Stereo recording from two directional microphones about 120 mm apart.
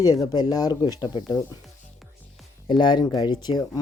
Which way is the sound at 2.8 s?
40° left (ahead or behind).